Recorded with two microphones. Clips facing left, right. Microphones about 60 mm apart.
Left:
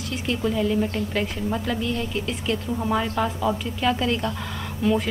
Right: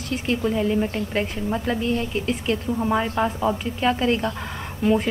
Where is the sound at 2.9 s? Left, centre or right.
Right.